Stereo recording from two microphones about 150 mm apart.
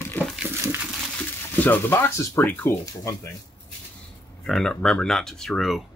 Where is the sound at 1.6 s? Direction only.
15° left (ahead or behind).